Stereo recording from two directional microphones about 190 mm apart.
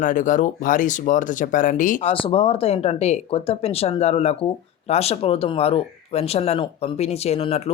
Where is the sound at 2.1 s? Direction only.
30° left (ahead or behind).